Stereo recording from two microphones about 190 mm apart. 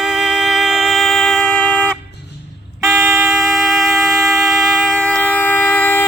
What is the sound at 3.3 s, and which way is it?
Music, centre (ahead or behind).